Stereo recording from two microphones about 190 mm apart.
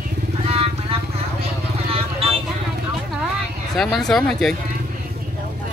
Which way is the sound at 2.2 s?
30° right (ahead or behind).